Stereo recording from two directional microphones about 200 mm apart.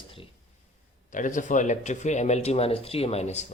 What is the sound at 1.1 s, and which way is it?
Speech, 40° left (ahead or behind).